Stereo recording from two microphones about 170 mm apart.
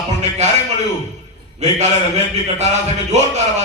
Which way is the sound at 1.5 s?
40° right (ahead or behind).